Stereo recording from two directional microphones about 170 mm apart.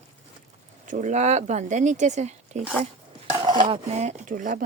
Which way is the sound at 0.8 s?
45° right (ahead or behind).